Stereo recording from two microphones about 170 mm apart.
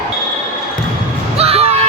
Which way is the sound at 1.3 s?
35° right (ahead or behind).